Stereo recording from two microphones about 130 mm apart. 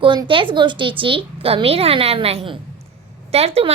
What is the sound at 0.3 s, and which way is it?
A woman's voice, 40° right (ahead or behind).